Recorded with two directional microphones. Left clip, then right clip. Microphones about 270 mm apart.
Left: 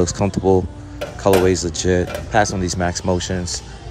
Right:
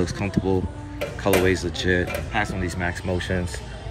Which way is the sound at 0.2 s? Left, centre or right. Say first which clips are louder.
Left 8 dB; centre.